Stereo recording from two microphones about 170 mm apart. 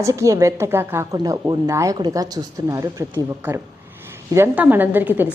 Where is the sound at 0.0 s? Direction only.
20° right (ahead or behind).